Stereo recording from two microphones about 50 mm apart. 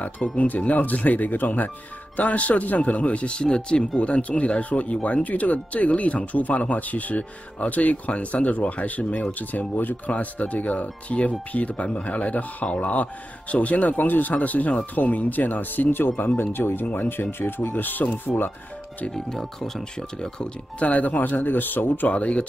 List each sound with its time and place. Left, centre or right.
0.5 s speech: left
19.1 s speech: centre
20.8 s speech: left
22.1 s speech: left